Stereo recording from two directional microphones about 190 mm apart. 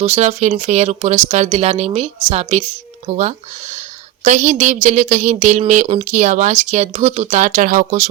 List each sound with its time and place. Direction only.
0.0 s a woman's voice: 35° right (ahead or behind)